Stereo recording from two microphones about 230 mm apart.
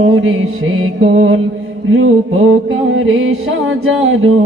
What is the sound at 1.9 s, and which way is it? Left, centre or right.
Music, right.